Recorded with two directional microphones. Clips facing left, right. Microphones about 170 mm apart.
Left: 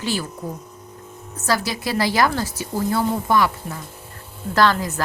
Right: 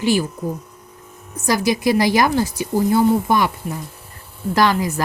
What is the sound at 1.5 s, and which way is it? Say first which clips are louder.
A woman's voice: right 6 dB; 15° right (ahead or behind).